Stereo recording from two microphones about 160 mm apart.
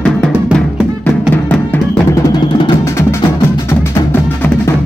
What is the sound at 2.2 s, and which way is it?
Music, 20° left (ahead or behind).